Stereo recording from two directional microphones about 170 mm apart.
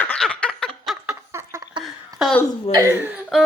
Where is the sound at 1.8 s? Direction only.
25° right (ahead or behind).